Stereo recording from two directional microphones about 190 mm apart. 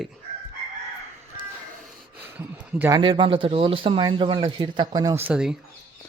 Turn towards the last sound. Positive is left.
turn(degrees=-5)  # may be behind; listen again after turning